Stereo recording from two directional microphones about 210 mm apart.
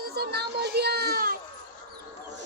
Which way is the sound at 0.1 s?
50° right (ahead or behind).